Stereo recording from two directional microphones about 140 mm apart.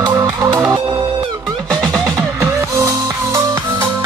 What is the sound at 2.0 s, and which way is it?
Music, 20° right (ahead or behind).